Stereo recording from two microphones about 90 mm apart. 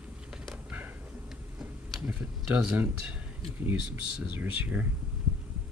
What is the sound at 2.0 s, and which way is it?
Tick-tock, 15° right (ahead or behind).